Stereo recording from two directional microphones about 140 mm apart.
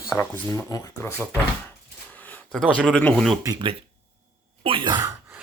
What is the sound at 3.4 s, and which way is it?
Speech, 25° right (ahead or behind).